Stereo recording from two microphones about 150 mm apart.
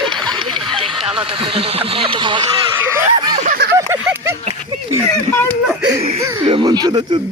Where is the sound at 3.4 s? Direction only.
75° right (ahead or behind).